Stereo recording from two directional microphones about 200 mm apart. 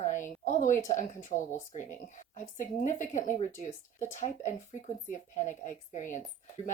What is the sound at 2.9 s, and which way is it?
A woman's voice, 40° left (ahead or behind).